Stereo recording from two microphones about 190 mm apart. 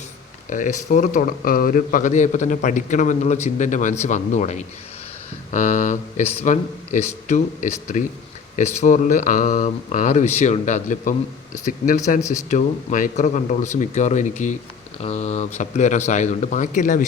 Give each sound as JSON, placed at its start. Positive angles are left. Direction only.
{"t": 0.5, "sound": "a man's voice", "side_deg": 40}
{"t": 12.2, "sound": "speech", "side_deg": 15}
{"t": 12.5, "sound": "a man's voice", "side_deg": 40}